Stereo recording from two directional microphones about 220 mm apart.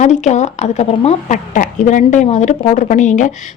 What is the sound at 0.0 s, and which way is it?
Speech, 30° left (ahead or behind).